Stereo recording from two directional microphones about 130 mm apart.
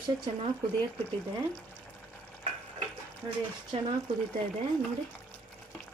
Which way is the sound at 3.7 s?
50° right (ahead or behind).